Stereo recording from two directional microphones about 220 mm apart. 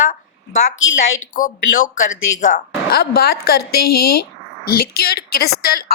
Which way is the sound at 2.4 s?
35° left (ahead or behind).